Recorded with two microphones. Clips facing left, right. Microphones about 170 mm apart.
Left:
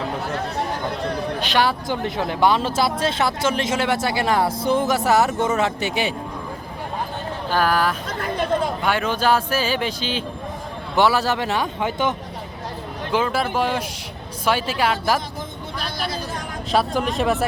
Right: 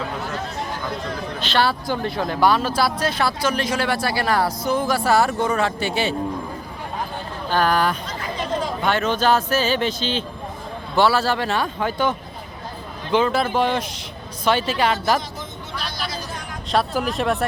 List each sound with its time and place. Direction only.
1.4 s speech: 15° left (ahead or behind)
7.5 s speech: 5° left (ahead or behind)
8.0 s chatter: 55° left (ahead or behind)
8.8 s speech: 10° left (ahead or behind)
13.1 s speech: 5° left (ahead or behind)
16.7 s speech: centre (ahead or behind)